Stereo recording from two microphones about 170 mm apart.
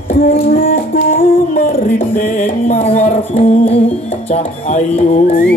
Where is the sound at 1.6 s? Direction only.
55° left (ahead or behind).